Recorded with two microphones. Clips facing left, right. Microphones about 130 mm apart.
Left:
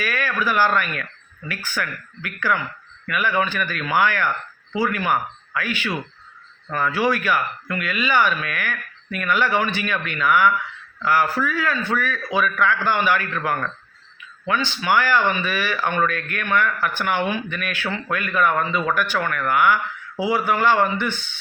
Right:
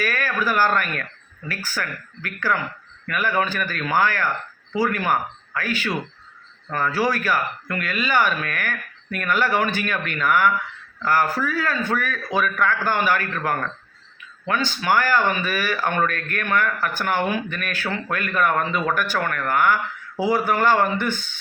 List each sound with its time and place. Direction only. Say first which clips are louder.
0.0 s speech: even; 45° right (ahead or behind)